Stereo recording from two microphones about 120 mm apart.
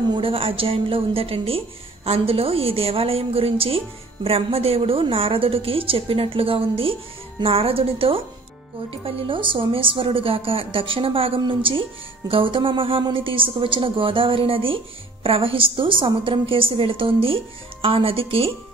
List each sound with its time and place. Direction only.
0.1 s a woman's voice: 50° right (ahead or behind)